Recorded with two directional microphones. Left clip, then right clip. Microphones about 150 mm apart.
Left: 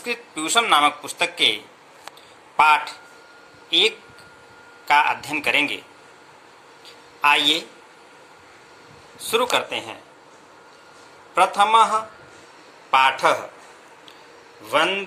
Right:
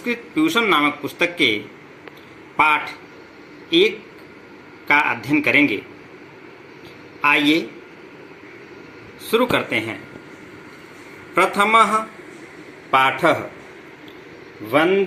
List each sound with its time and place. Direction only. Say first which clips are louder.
0.0 s speech: right 6 dB; 20° left (ahead or behind)
7.2 s speech: right 1 dB; 20° left (ahead or behind)
9.3 s speech: right 2 dB; 20° left (ahead or behind)
11.5 s a man's voice: right 2 dB; 20° left (ahead or behind)
14.7 s speech: right 3 dB; 15° left (ahead or behind)